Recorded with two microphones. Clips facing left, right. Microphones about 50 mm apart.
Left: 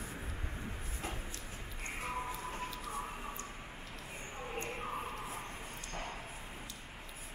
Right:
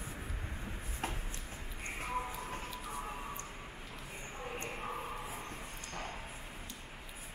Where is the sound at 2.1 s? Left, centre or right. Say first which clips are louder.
Right 2 dB; centre.